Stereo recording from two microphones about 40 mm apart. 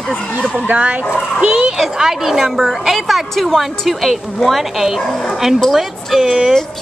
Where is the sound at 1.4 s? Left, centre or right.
Right.